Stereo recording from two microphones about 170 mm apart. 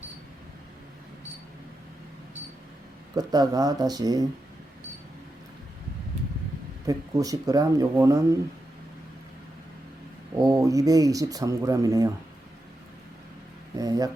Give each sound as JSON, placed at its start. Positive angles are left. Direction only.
{"t": 3.2, "sound": "speech", "side_deg": -20}
{"t": 6.8, "sound": "speech", "side_deg": -20}
{"t": 10.4, "sound": "speech", "side_deg": -20}
{"t": 13.7, "sound": "speech", "side_deg": -20}